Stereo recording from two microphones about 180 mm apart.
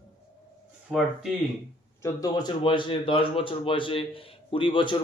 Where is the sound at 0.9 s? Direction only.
Centre (ahead or behind).